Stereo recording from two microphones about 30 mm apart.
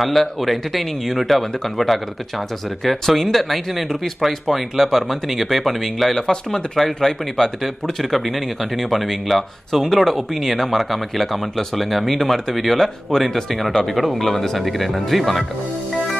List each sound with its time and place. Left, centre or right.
0.2 s speech: centre
6.2 s speech: centre